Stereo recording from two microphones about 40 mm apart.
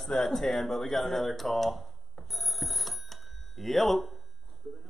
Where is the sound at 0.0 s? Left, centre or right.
Centre.